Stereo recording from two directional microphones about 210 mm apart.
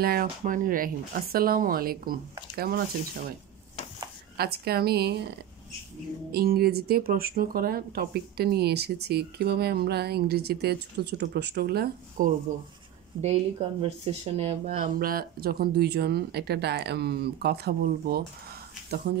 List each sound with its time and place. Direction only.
0.0 s speech: 45° right (ahead or behind)
4.4 s speech: 50° right (ahead or behind)
6.3 s speech: 45° right (ahead or behind)
13.2 s speech: 30° right (ahead or behind)
14.8 s speech: 45° right (ahead or behind)